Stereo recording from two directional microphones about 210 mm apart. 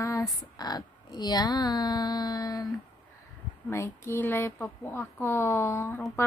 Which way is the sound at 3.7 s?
10° left (ahead or behind).